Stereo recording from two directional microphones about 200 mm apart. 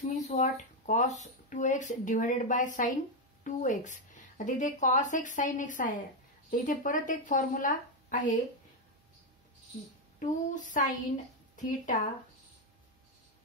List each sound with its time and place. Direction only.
0.1 s speech: 35° left (ahead or behind)
10.1 s speech: 40° left (ahead or behind)